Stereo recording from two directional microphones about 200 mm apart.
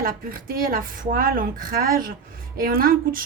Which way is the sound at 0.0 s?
45° right (ahead or behind).